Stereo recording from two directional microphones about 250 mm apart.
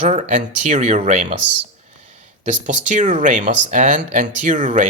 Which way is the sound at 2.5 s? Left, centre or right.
Right.